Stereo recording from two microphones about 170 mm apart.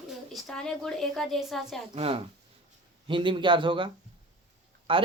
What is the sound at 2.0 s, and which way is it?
A man's voice, 35° right (ahead or behind).